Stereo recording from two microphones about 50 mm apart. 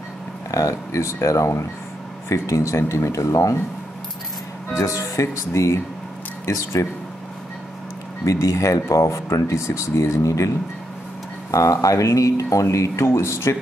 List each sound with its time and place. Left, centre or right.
0.5 s speech: left
4.7 s speech: left
8.4 s speech: left
11.8 s speech: left